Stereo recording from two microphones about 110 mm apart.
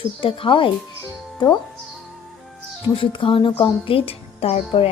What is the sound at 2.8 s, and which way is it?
Speech, 55° left (ahead or behind).